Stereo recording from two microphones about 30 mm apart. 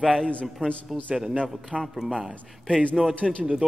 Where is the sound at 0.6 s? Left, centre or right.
Right.